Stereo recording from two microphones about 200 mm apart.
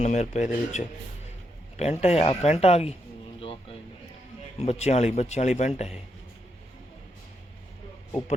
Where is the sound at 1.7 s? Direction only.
35° left (ahead or behind).